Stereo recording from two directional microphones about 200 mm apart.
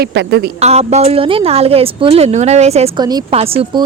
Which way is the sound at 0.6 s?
35° right (ahead or behind).